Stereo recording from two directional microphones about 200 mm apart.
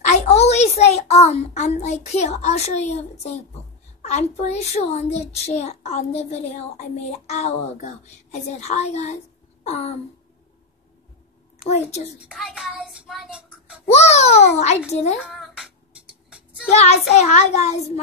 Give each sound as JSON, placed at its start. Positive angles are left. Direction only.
{"t": 0.0, "sound": "a child's voice", "side_deg": 35}
{"t": 12.4, "sound": "a child's voice", "side_deg": 0}
{"t": 13.8, "sound": "a child's voice", "side_deg": 35}
{"t": 15.1, "sound": "a sound", "side_deg": 0}
{"t": 16.7, "sound": "a child's voice", "side_deg": 35}